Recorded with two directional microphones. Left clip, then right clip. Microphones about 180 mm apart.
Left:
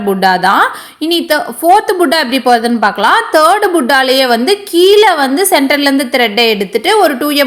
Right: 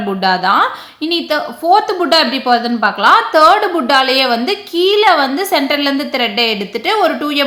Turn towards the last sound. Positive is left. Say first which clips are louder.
# left 4 dB
turn(degrees=25)  # may be behind; listen again after turning